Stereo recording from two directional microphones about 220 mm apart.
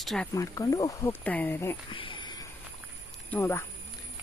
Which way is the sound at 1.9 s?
20° left (ahead or behind).